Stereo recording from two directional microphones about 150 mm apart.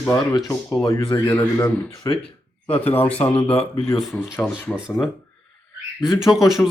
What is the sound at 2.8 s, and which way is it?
Speech, 10° left (ahead or behind).